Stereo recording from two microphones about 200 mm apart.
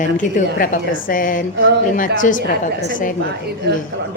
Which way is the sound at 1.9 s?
40° left (ahead or behind).